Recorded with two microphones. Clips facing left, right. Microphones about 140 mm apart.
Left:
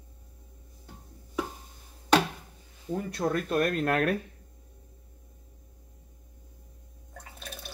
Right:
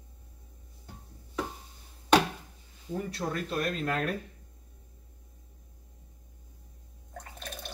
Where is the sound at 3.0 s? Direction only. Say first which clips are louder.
Left 7 dB; 50° left (ahead or behind).